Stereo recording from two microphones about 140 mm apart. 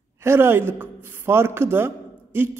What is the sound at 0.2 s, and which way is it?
A man's voice, 20° right (ahead or behind).